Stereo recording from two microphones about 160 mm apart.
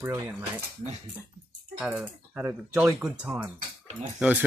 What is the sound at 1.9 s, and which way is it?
Speech, 10° right (ahead or behind).